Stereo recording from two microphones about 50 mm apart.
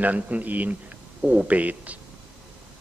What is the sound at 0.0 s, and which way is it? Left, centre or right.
Speech, right.